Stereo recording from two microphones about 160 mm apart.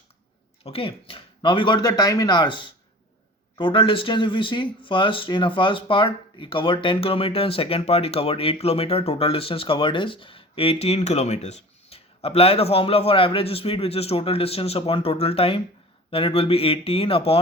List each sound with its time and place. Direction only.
0.6 s speech: 35° left (ahead or behind)